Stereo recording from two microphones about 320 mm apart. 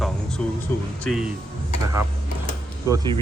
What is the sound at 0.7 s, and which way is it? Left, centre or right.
Speech, centre.